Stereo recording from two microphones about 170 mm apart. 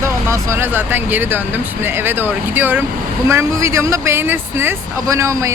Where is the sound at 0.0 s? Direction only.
15° right (ahead or behind).